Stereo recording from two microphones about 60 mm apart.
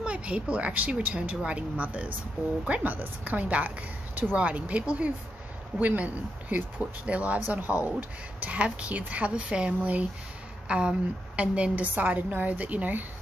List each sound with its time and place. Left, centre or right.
0.0 s a woman's voice: centre